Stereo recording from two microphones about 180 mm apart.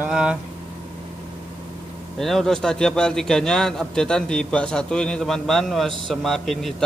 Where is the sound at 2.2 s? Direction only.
Centre (ahead or behind).